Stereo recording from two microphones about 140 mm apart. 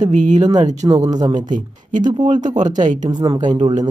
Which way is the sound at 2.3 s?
65° right (ahead or behind).